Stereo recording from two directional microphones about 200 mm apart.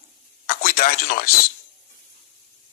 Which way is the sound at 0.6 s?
45° left (ahead or behind).